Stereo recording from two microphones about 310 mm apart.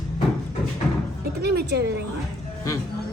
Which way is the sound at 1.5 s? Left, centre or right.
Right.